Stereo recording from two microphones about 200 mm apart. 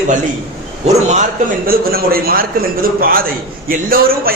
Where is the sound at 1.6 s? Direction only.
45° right (ahead or behind).